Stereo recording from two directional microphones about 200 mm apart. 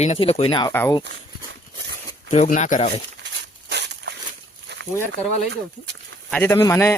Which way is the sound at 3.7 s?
60° right (ahead or behind).